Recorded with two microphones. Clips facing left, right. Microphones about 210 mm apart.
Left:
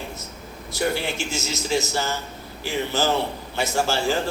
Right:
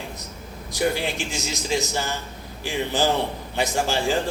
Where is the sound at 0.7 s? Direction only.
15° right (ahead or behind).